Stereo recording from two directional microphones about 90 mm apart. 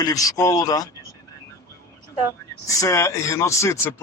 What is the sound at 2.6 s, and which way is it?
A man's voice, 35° left (ahead or behind).